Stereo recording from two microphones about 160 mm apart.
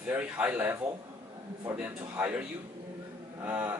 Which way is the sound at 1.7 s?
10° right (ahead or behind).